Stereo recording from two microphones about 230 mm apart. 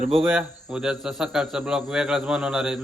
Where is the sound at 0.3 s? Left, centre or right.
Centre.